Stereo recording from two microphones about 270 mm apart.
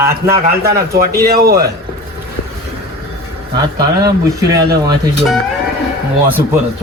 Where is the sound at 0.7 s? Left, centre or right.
Right.